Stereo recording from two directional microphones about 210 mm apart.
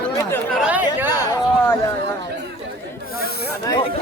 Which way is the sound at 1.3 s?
15° left (ahead or behind).